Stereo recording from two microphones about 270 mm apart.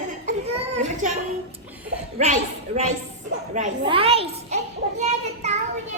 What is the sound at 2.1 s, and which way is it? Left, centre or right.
A child's voice, right.